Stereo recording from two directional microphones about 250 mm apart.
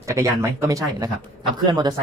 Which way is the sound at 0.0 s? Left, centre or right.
Centre.